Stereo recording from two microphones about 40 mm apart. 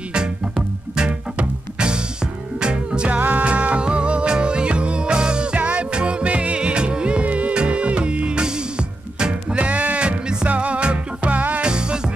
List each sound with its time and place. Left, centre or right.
2.6 s music: right
3.1 s music: right
5.6 s music: right
9.6 s music: right
11.6 s music: right